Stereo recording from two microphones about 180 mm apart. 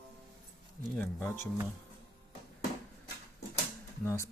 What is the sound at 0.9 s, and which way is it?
Speech, 15° left (ahead or behind).